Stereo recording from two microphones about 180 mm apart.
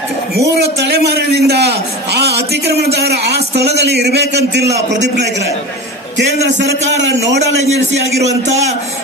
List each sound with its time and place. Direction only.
0.3 s a man's voice: 65° right (ahead or behind)
6.9 s a man's voice: 85° right
8.4 s a man's voice: 40° right (ahead or behind)